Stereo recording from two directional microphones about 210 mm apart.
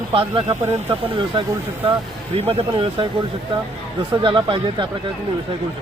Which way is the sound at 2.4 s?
25° right (ahead or behind).